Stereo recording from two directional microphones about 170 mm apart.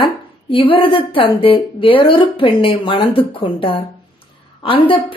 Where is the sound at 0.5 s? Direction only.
30° left (ahead or behind).